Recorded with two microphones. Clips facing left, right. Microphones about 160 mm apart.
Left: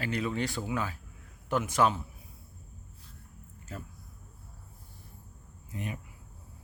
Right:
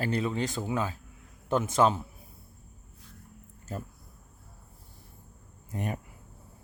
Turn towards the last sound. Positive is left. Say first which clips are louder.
# right 4 dB
turn(degrees=-45)  # may be behind; listen again after turning